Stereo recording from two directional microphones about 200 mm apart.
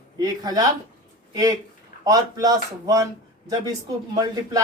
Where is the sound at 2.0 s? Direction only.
15° right (ahead or behind).